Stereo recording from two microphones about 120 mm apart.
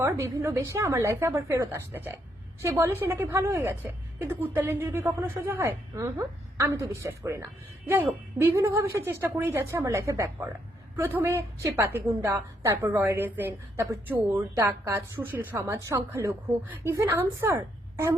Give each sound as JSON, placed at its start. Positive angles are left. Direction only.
{"t": 0.0, "sound": "a woman's voice", "side_deg": -25}
{"t": 13.1, "sound": "a woman's voice", "side_deg": -15}